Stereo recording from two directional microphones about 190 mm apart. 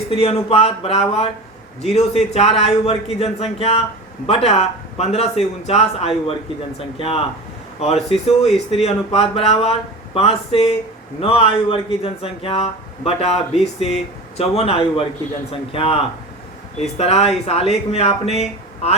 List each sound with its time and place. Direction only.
0.1 s speech: 30° left (ahead or behind)